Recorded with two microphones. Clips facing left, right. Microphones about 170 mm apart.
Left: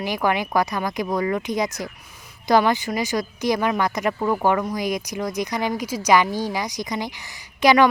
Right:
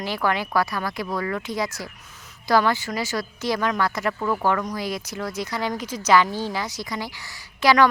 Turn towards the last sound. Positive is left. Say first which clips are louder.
# left 2 dB
turn(degrees=15)  # may be behind; listen again after turning